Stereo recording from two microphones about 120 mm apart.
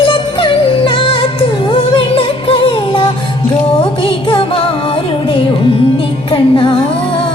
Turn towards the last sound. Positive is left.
turn(degrees=45)  # may be behind; listen again after turning